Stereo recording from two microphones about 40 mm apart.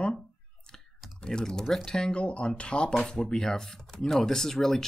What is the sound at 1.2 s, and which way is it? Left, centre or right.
Speech, centre.